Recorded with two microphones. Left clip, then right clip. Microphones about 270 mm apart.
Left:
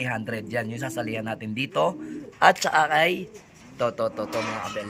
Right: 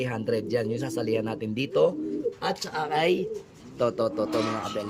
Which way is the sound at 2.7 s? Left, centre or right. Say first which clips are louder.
Left 4 dB; centre.